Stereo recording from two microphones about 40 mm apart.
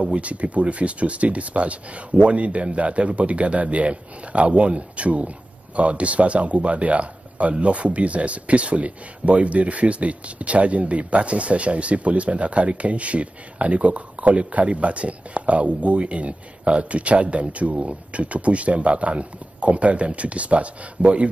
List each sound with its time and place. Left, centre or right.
0.0 s speech: right